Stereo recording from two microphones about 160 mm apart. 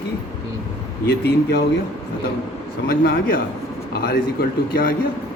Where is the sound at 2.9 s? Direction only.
75° left (ahead or behind).